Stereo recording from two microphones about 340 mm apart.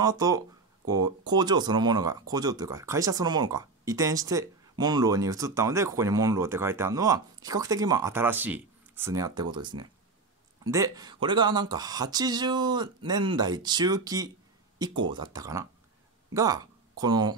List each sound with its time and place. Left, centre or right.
0.0 s speech: centre